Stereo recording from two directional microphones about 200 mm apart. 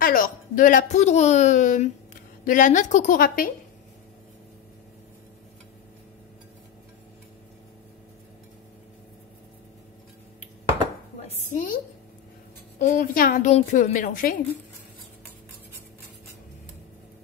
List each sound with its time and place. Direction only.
0.0 s a woman's voice: 45° left (ahead or behind)
11.2 s a woman's voice: 40° left (ahead or behind)